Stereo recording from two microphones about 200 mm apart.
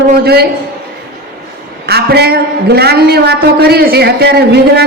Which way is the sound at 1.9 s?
55° right (ahead or behind).